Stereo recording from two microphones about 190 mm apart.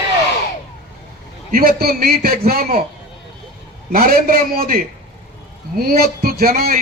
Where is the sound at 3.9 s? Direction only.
50° right (ahead or behind).